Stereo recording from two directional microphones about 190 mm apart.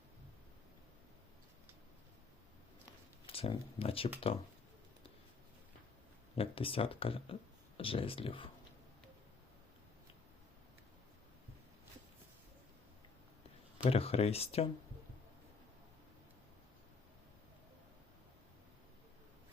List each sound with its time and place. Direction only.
3.2 s speech: 30° left (ahead or behind)
6.3 s speech: 30° left (ahead or behind)
13.9 s speech: 30° left (ahead or behind)